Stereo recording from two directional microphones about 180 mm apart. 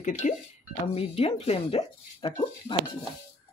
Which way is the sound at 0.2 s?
40° left (ahead or behind).